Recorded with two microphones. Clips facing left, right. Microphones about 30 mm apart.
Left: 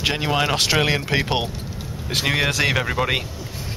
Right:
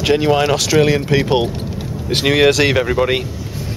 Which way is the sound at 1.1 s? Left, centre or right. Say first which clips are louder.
Right 6 dB; centre.